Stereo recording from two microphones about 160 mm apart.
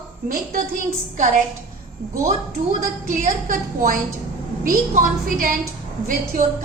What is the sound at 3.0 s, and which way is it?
A woman's voice, 55° right (ahead or behind).